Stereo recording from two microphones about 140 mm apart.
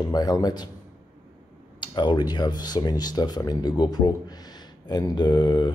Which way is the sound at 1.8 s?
35° left (ahead or behind).